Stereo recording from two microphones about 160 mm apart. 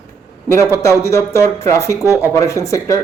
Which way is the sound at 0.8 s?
15° left (ahead or behind).